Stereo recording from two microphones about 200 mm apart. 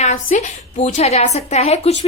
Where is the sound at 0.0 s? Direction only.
35° left (ahead or behind).